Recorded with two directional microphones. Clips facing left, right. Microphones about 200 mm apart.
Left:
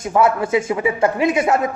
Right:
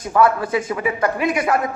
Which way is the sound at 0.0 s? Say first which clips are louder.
Even; 25° left (ahead or behind).